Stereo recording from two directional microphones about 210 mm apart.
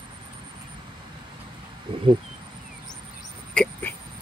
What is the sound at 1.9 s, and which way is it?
Speech, 25° right (ahead or behind).